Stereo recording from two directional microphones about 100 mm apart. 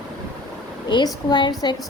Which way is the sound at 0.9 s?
50° left (ahead or behind).